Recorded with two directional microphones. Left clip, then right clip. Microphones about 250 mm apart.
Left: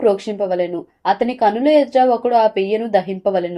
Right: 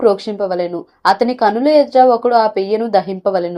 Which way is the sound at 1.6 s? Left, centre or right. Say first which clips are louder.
Right 4 dB; centre.